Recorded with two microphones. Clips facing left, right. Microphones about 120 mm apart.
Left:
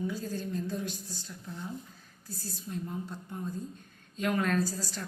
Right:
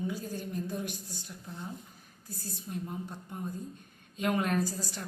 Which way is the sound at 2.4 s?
20° right (ahead or behind).